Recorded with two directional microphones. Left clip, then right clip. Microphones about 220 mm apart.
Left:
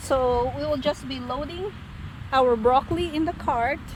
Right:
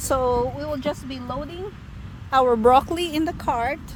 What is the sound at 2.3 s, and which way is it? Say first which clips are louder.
Speech: right 3 dB; 40° right (ahead or behind).